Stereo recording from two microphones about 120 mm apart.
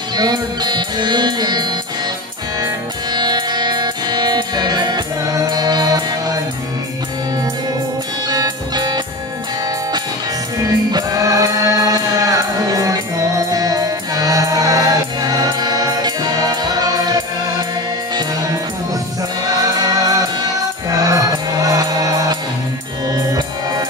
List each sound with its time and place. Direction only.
0.1 s music: 35° right (ahead or behind)
8.3 s music: 35° right (ahead or behind)
10.6 s music: 30° right (ahead or behind)
19.6 s music: 30° right (ahead or behind)